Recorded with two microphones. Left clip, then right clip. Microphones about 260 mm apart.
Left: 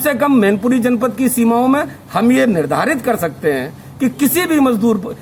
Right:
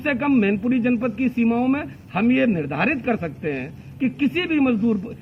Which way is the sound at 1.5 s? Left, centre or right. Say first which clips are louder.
Left 12 dB; centre.